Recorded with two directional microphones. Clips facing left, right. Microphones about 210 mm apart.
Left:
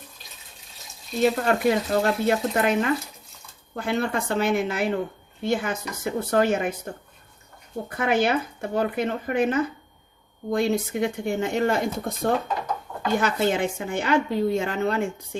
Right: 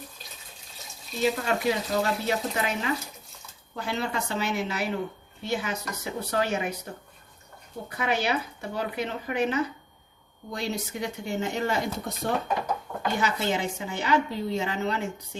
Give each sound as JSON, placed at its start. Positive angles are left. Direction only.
{"t": 1.2, "sound": "a woman's voice", "side_deg": 55}
{"t": 7.9, "sound": "a woman's voice", "side_deg": 50}